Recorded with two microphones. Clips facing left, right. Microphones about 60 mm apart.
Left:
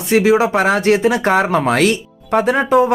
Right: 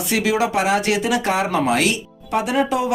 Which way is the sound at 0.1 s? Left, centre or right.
Left.